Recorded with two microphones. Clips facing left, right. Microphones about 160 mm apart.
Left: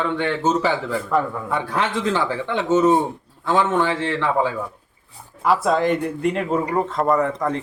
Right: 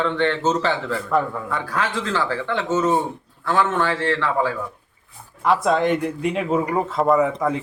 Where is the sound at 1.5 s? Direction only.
20° left (ahead or behind).